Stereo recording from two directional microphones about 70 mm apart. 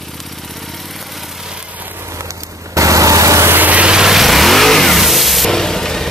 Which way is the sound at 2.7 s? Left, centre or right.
Right.